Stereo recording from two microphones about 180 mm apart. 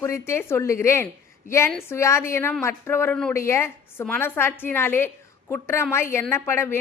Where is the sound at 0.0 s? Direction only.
15° left (ahead or behind).